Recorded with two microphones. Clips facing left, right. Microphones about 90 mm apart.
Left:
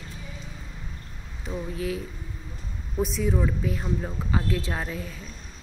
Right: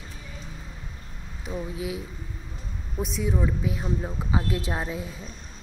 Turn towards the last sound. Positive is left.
turn(degrees=-20)  # may be behind; listen again after turning